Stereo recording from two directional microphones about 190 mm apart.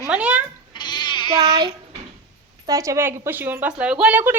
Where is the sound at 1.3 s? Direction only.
20° right (ahead or behind).